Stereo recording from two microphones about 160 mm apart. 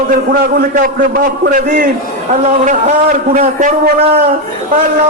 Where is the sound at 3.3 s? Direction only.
50° right (ahead or behind).